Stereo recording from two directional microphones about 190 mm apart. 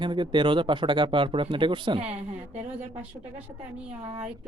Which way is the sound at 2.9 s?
5° right (ahead or behind).